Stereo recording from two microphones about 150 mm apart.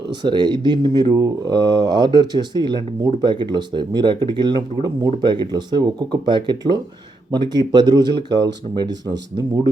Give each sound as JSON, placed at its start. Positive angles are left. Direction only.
{"t": 0.2, "sound": "speech", "side_deg": -30}